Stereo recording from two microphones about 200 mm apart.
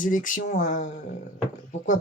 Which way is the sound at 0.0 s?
40° left (ahead or behind).